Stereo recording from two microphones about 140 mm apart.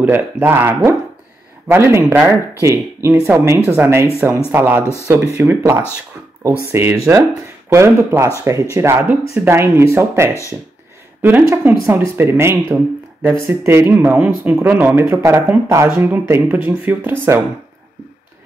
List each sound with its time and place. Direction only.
0.0 s speech: 15° right (ahead or behind)
15.0 s speech: 20° right (ahead or behind)